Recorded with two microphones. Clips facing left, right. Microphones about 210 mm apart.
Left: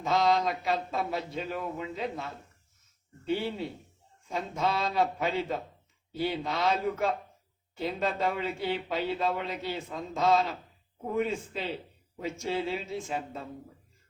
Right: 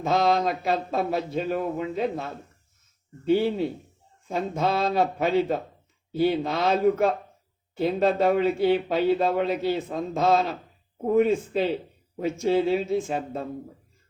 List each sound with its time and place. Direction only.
0.0 s speech: 50° right (ahead or behind)
4.5 s speech: 50° right (ahead or behind)